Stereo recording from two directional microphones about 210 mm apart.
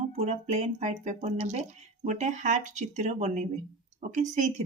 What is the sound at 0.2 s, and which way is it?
Speech, 30° right (ahead or behind).